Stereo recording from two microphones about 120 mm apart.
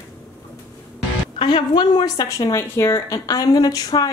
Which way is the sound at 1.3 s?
40° left (ahead or behind).